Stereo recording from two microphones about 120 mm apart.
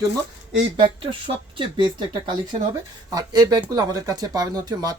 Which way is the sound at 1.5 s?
45° right (ahead or behind).